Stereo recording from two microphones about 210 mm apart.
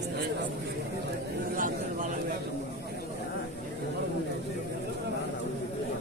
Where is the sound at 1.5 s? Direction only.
40° right (ahead or behind).